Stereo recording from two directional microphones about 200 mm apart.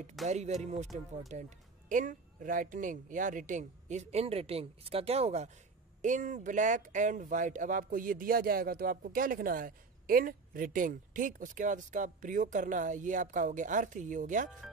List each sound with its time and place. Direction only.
0.3 s speech: 35° right (ahead or behind)